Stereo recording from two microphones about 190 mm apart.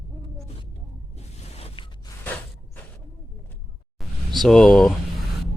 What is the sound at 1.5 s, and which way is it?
Zipper, 30° left (ahead or behind).